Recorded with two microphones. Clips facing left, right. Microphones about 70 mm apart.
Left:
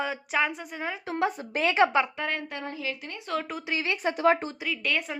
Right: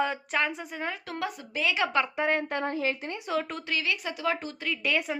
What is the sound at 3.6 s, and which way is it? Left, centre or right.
Speech, left.